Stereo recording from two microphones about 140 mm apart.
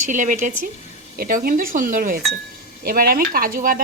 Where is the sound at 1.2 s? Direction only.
90° right.